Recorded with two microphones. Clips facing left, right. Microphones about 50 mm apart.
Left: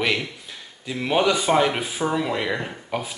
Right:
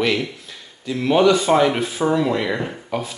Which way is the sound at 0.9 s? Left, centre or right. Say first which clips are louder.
Right 5 dB; centre.